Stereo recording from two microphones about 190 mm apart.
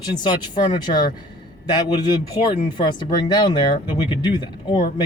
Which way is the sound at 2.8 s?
25° left (ahead or behind).